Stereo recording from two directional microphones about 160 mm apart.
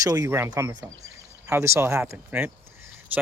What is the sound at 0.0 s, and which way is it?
Speech, 20° right (ahead or behind).